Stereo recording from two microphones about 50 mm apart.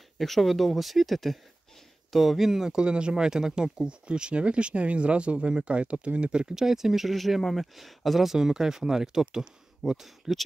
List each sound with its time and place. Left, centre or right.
0.2 s speech: centre; by 6.5 s right
6.5 s speech: centre